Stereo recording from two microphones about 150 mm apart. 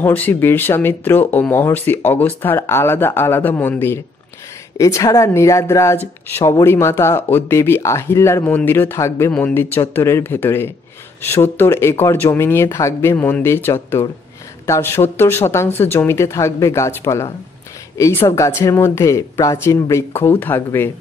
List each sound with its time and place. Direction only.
0.0 s speech: 15° left (ahead or behind)